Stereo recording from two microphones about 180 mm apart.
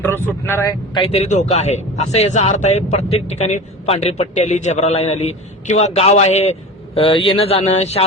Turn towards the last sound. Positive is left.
turn(degrees=35)  # may be behind; listen again after turning